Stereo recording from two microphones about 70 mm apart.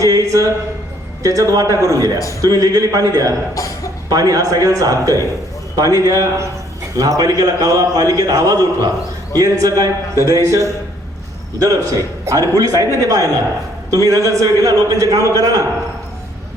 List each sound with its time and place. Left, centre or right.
0.0 s a man's voice: right